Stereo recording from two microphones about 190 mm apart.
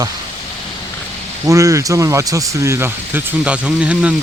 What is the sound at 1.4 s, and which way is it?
Speech, 15° right (ahead or behind).